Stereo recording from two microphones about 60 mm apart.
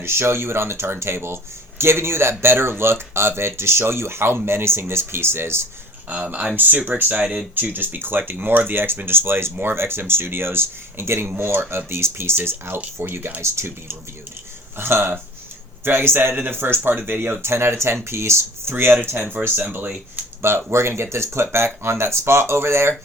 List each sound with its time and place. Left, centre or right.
0.0 s speech: right
6.1 s speech: right
20.4 s speech: right